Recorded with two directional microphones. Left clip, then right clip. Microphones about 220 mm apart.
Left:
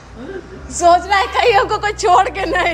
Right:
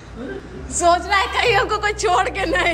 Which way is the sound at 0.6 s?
20° left (ahead or behind).